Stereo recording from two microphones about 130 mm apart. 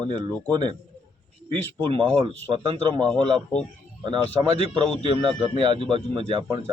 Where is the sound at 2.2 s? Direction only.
40° right (ahead or behind).